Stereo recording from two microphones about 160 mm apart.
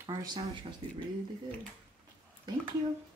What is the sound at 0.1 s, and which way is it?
Speech, 25° right (ahead or behind).